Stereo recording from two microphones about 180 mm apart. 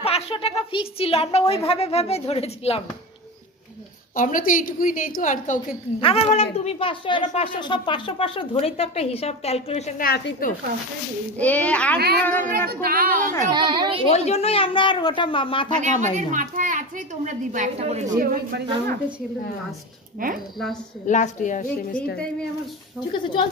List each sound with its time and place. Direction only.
0.0 s speech: 35° left (ahead or behind)
4.1 s a woman's voice: 50° left (ahead or behind)
5.9 s speech: 30° left (ahead or behind)
9.9 s speech: 60° left (ahead or behind)
11.3 s a child's voice: 10° left (ahead or behind)
12.4 s a woman's voice: 55° right (ahead or behind)
13.5 s a child's voice: 25° right (ahead or behind)
14.1 s a woman's voice: 35° left (ahead or behind)
15.8 s a woman's voice: 45° right (ahead or behind)
20.2 s a woman's voice: 50° right (ahead or behind)
21.1 s a woman's voice: 45° left (ahead or behind)
23.1 s a woman's voice: 25° left (ahead or behind)